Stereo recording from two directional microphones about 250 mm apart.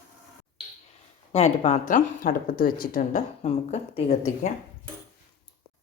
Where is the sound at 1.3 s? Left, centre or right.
Left.